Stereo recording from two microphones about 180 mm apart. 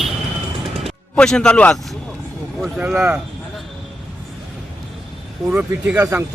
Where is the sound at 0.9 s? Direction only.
5° left (ahead or behind).